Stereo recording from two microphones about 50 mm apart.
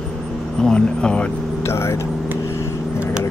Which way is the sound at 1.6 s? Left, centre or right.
Left.